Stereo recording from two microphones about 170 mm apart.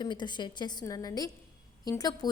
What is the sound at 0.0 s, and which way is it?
A woman's voice, 25° left (ahead or behind).